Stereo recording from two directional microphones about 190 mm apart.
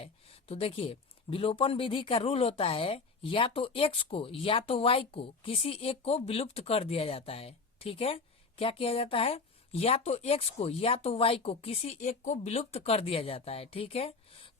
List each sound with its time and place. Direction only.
0.0 s speech: 30° left (ahead or behind)